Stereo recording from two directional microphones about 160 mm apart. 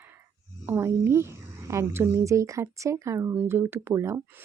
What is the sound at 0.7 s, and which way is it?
A woman's voice, 15° right (ahead or behind).